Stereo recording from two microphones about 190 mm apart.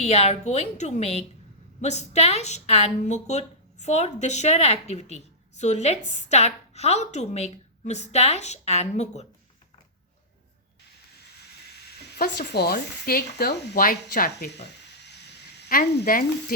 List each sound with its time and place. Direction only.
0.0 s a woman's voice: 35° left (ahead or behind)
12.1 s speech: 55° left (ahead or behind)
15.8 s speech: 50° left (ahead or behind)